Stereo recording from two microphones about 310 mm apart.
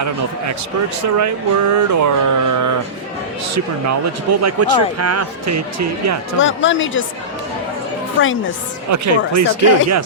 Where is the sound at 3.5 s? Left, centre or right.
Right.